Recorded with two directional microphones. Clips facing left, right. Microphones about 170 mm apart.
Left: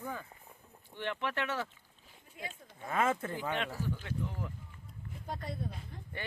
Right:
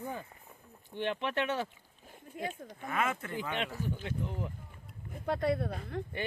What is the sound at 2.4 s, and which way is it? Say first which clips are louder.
Speech: right 8 dB; 50° right (ahead or behind).